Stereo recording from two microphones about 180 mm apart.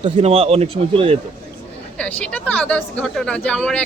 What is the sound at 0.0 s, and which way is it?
Speech, 35° right (ahead or behind).